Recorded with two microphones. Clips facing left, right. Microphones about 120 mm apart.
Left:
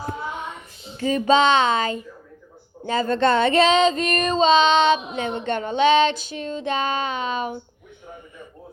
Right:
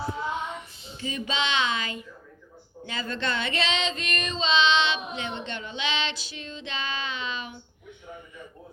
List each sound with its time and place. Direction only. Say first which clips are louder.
0.0 s child singing: left 1 dB; 50° left (ahead or behind)
2.8 s female singing: left 12 dB; 45° left (ahead or behind)